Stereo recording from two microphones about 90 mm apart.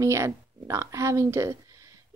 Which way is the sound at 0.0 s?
35° right (ahead or behind).